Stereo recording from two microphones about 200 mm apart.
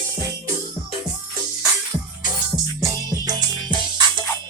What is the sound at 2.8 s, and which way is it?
Music, 20° right (ahead or behind).